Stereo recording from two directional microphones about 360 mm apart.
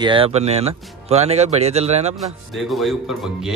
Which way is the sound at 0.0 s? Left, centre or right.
Centre.